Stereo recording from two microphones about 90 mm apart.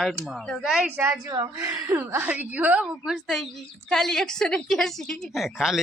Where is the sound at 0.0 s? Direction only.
Centre (ahead or behind).